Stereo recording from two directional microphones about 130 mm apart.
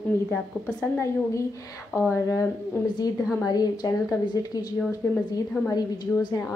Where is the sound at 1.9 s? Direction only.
20° left (ahead or behind).